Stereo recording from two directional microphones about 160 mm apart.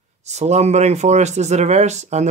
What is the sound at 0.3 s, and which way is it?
Speech, 45° right (ahead or behind).